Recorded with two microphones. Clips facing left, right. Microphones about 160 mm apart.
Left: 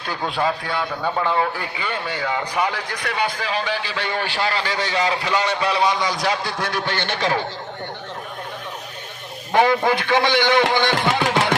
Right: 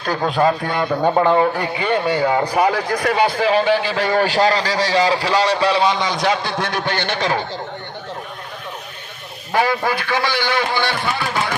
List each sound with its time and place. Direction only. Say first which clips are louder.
0.0 s a man's voice: right 6 dB; 45° right (ahead or behind); by 6.7 s 25° right (ahead or behind)
9.5 s a man's voice: left 2 dB; 20° left (ahead or behind)
10.9 s a sound: left 3 dB; 90° left